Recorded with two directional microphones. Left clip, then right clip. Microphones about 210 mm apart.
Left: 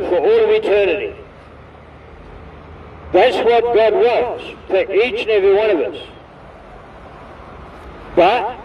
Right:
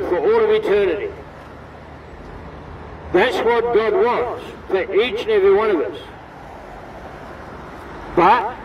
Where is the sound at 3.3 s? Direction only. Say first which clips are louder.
Left 4 dB; 35° left (ahead or behind).